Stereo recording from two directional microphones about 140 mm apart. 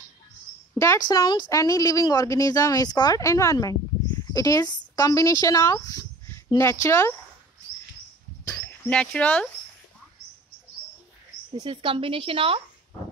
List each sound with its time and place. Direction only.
0.7 s speech: 25° left (ahead or behind)
8.6 s speech: 10° left (ahead or behind)
11.7 s a woman's voice: 40° right (ahead or behind)